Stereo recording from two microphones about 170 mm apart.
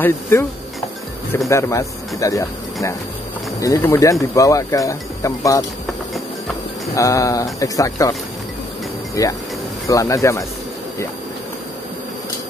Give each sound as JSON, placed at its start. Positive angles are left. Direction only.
{"t": 0.0, "sound": "speech", "side_deg": 15}
{"t": 1.5, "sound": "speech", "side_deg": 15}
{"t": 7.0, "sound": "speech", "side_deg": 20}
{"t": 9.2, "sound": "speech", "side_deg": 20}